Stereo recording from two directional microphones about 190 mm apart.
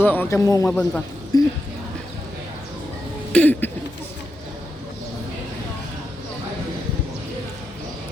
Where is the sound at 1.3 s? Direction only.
20° left (ahead or behind).